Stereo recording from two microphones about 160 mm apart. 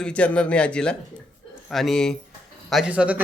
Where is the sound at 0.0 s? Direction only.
5° left (ahead or behind).